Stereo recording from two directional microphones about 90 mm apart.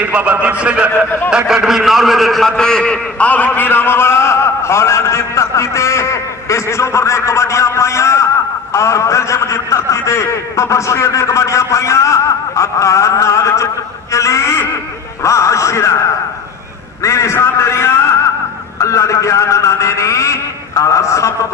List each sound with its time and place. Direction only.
0.0 s a man's voice: 15° right (ahead or behind); by 13.7 s 35° left (ahead or behind)
14.1 s a sound: 35° left (ahead or behind)
15.2 s a man's voice: 35° left (ahead or behind)
17.0 s a man's voice: 35° left (ahead or behind)